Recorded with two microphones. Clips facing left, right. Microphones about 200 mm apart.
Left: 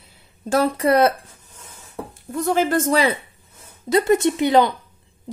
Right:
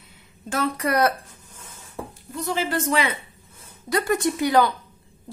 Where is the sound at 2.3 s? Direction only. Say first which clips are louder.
Left 6 dB; 50° left (ahead or behind).